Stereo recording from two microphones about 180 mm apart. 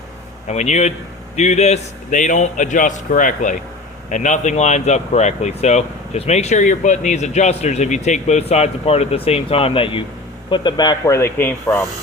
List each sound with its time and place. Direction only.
0.4 s speech: 40° left (ahead or behind); by 11.9 s 10° left (ahead or behind)